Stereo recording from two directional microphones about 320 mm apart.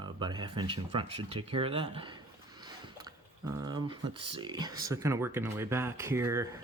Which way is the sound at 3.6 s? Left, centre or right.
Centre.